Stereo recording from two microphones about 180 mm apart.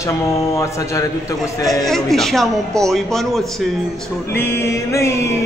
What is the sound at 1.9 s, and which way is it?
Speech, centre (ahead or behind).